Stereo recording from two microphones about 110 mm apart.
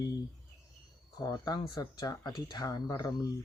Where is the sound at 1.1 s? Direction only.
35° left (ahead or behind).